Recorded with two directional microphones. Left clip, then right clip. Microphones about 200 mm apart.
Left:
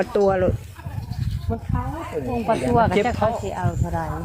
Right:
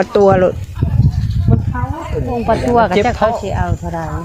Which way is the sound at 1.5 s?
Centre (ahead or behind).